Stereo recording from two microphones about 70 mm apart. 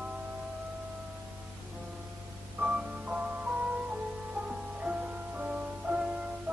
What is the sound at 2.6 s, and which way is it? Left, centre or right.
Music, centre.